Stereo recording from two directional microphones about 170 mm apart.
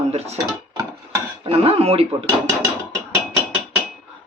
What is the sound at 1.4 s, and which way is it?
Speech, 35° right (ahead or behind).